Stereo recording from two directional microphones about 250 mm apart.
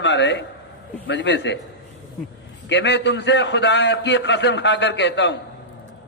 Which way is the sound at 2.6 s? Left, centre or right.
Left.